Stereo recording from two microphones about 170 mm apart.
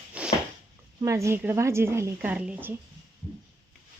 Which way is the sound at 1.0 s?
20° right (ahead or behind).